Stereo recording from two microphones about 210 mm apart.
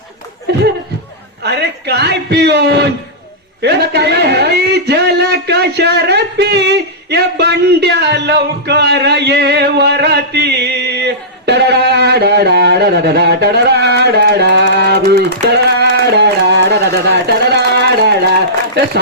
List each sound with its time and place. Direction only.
1.5 s speech: 50° right (ahead or behind)
3.6 s a sound: 50° right (ahead or behind)
7.1 s speech: 50° right (ahead or behind)